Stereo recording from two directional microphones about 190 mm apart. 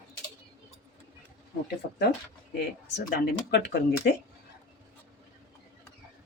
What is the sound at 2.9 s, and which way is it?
Speech, 55° left (ahead or behind).